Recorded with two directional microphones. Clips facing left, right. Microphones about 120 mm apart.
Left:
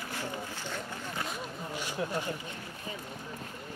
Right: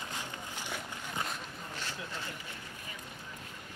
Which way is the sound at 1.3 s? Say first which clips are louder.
Left 4 dB; 10° left (ahead or behind).